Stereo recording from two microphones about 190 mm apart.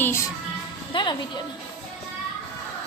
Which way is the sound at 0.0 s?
15° left (ahead or behind).